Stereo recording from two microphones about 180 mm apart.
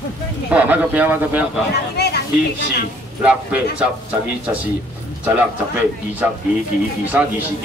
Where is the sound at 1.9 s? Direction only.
65° left (ahead or behind).